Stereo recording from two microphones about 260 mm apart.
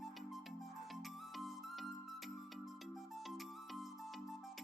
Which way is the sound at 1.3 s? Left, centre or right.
Centre.